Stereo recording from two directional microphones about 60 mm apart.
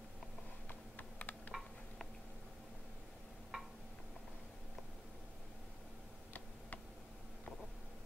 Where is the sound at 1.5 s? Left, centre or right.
Centre.